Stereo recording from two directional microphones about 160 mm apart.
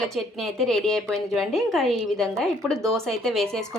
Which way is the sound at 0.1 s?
Centre (ahead or behind).